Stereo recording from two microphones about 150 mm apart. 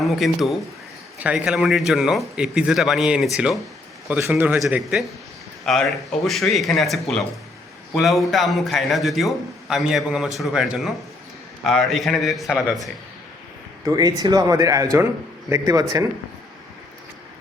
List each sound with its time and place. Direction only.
0.0 s a man's voice: centre (ahead or behind)
13.8 s speech: 25° right (ahead or behind)